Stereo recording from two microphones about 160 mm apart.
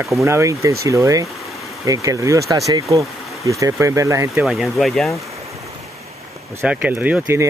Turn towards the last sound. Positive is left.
turn(degrees=-15)  # may be behind; listen again after turning